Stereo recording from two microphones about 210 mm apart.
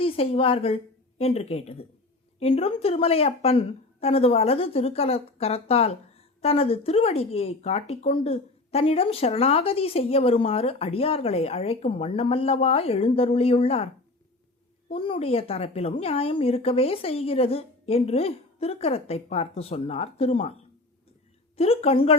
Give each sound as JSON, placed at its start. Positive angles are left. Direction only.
{"t": 0.0, "sound": "a woman's voice", "side_deg": 25}